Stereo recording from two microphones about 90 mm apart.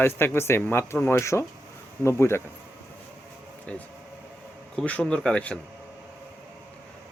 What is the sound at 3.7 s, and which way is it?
Speech, 10° left (ahead or behind).